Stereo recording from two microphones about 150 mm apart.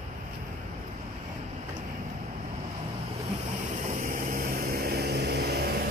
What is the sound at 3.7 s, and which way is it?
Vehicle, 60° right (ahead or behind).